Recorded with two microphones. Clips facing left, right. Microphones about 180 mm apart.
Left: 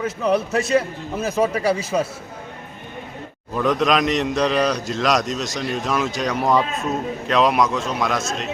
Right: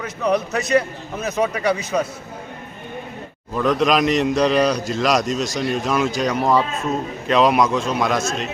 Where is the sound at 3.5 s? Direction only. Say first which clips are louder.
Right 1 dB; centre (ahead or behind).